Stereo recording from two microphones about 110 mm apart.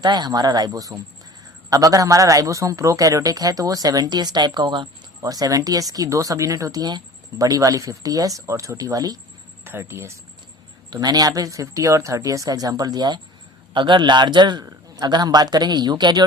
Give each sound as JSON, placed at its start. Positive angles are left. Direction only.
{"t": 0.0, "sound": "speech", "side_deg": -40}
{"t": 9.6, "sound": "speech", "side_deg": -20}
{"t": 10.9, "sound": "speech", "side_deg": -35}